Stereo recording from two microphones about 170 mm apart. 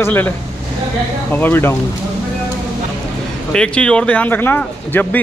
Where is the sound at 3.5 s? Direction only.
5° left (ahead or behind).